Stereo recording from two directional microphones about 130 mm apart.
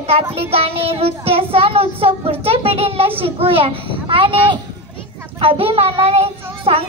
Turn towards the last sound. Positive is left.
turn(degrees=-45)  # may be behind; listen again after turning